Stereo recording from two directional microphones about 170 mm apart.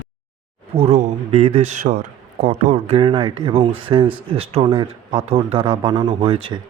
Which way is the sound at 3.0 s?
30° right (ahead or behind).